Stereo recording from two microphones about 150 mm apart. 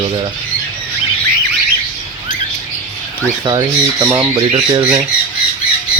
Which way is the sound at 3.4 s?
25° right (ahead or behind).